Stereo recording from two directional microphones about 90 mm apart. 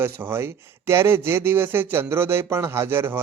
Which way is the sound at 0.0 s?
25° right (ahead or behind).